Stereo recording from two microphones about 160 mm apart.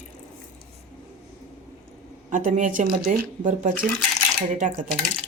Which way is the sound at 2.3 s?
50° right (ahead or behind).